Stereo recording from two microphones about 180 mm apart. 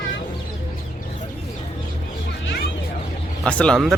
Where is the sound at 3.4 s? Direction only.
5° left (ahead or behind).